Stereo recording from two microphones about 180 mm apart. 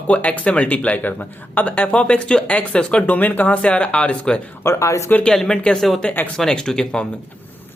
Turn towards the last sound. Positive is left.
turn(degrees=5)  # may be behind; listen again after turning